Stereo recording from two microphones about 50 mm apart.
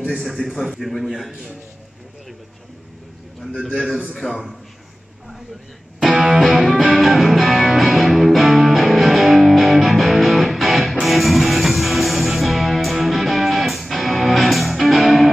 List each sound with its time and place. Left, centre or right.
0.2 s a man's voice: centre
4.2 s a man's voice: left
6.0 s music: centre